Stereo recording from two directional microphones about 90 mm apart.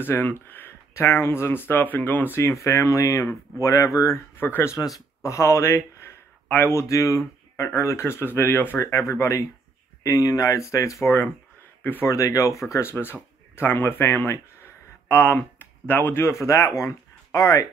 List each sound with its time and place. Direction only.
0.0 s speech: 25° left (ahead or behind)
4.7 s speech: 40° left (ahead or behind); by 12.1 s 20° left (ahead or behind)
12.1 s speech: 40° left (ahead or behind)